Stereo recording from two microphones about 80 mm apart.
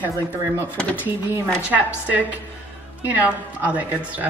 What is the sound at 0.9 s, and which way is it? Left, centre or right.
Speech, right.